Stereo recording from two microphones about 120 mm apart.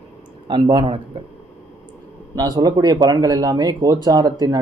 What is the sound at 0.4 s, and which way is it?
Speech, 40° right (ahead or behind).